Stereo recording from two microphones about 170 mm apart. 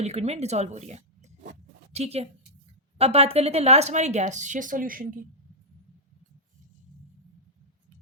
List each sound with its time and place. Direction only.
0.0 s a woman's voice: 40° right (ahead or behind); by 5.2 s 55° right (ahead or behind)